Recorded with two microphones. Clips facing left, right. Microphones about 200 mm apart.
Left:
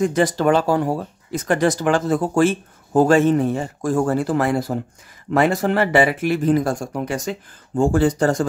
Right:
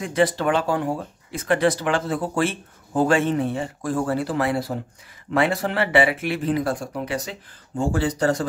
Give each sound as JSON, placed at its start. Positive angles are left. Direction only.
{"t": 0.0, "sound": "speech", "side_deg": 45}